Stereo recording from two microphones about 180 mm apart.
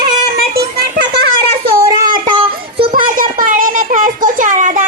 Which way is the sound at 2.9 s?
50° right (ahead or behind).